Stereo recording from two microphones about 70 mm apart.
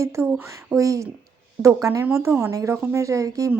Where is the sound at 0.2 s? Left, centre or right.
Right.